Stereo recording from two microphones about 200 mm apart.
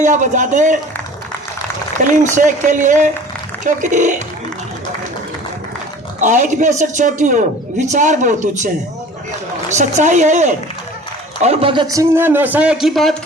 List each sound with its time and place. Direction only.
0.0 s a man's voice: 40° right (ahead or behind)
2.0 s a man's voice: 40° right (ahead or behind)
6.1 s a man's voice: 40° right (ahead or behind)
11.4 s a man's voice: 25° right (ahead or behind); by 13.1 s centre (ahead or behind)